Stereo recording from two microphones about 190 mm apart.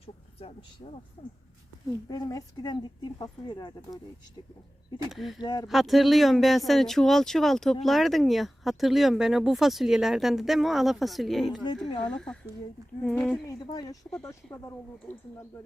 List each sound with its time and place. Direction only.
2.0 s speech: 20° left (ahead or behind)
5.1 s speech: centre (ahead or behind)
5.4 s speech: 20° left (ahead or behind)
5.6 s speech: centre (ahead or behind)
11.6 s speech: 25° left (ahead or behind)
12.0 s speech: 5° left (ahead or behind)
13.6 s speech: 20° left (ahead or behind)